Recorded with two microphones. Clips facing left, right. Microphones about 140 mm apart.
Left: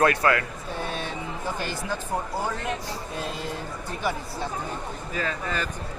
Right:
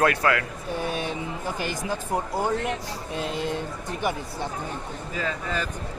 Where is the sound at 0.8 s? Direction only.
15° right (ahead or behind).